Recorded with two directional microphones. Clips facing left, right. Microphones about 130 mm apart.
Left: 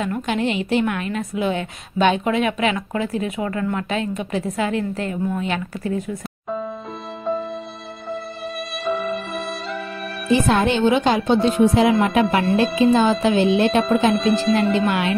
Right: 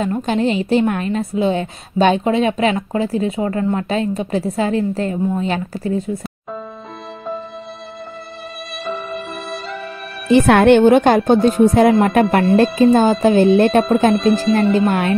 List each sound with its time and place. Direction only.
0.0 s a woman's voice: 35° right (ahead or behind)
8.8 s music: centre (ahead or behind)
10.3 s speech: 65° right (ahead or behind); by 14.1 s 45° right (ahead or behind)
14.1 s speech: centre (ahead or behind)
14.9 s speech: 50° right (ahead or behind)